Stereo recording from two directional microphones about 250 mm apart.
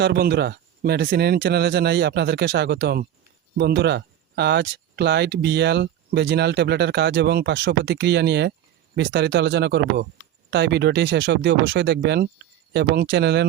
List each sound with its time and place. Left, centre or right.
0.0 s speech: right